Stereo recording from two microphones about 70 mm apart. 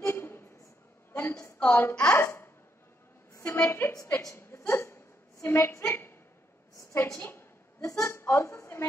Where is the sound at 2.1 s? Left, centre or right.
Left.